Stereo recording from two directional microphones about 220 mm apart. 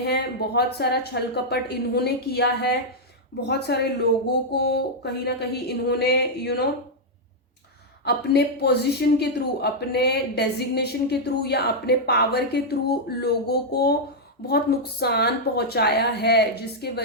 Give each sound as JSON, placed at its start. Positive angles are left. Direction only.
{"t": 0.0, "sound": "speech", "side_deg": 50}
{"t": 8.0, "sound": "speech", "side_deg": 50}